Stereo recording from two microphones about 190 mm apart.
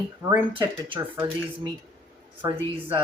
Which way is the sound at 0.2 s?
15° right (ahead or behind).